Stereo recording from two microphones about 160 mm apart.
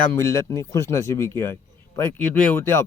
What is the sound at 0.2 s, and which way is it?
Speech, 20° left (ahead or behind).